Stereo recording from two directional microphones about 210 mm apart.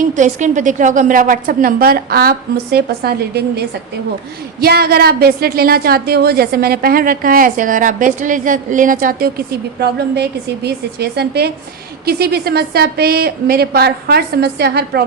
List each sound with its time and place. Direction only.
0.1 s a woman's voice: 35° right (ahead or behind)